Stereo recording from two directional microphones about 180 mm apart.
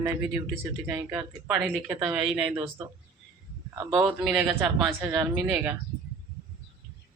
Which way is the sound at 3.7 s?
15° right (ahead or behind).